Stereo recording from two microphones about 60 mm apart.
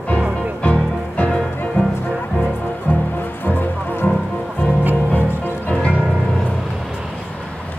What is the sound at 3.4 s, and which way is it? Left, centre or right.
Music, left.